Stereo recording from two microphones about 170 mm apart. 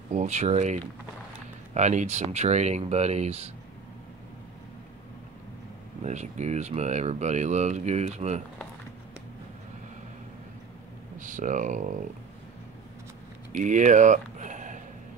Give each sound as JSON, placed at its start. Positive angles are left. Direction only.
{"t": 0.1, "sound": "speech", "side_deg": -40}
{"t": 6.0, "sound": "speech", "side_deg": -45}
{"t": 11.1, "sound": "speech", "side_deg": -50}
{"t": 13.5, "sound": "a sound", "side_deg": -45}